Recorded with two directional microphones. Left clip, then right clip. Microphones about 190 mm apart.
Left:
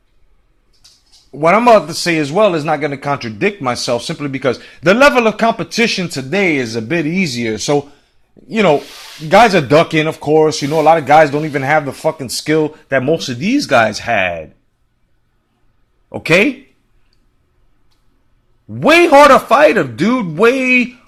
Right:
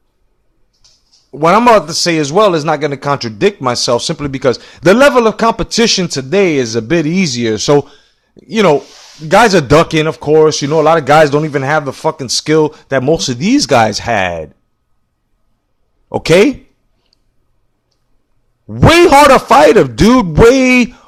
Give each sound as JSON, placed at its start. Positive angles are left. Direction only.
{"t": 1.3, "sound": "speech", "side_deg": -35}
{"t": 16.1, "sound": "a man's voice", "side_deg": -40}
{"t": 18.7, "sound": "a man's voice", "side_deg": -45}